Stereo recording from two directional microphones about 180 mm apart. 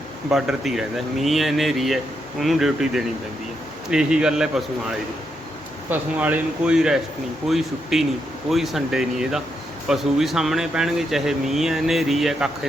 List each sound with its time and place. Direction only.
0.3 s speech: 5° right (ahead or behind)
5.9 s speech: 10° right (ahead or behind)